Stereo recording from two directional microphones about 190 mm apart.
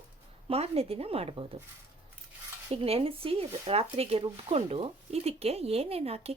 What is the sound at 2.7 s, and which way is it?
A woman's voice, 30° right (ahead or behind).